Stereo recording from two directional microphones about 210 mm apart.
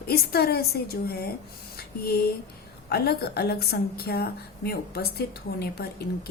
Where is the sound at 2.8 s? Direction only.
50° left (ahead or behind).